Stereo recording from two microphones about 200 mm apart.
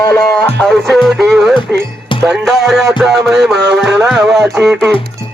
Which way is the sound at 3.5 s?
60° right (ahead or behind).